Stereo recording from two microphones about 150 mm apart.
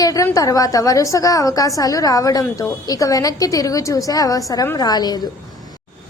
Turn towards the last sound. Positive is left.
turn(degrees=25)  # may be behind; listen again after turning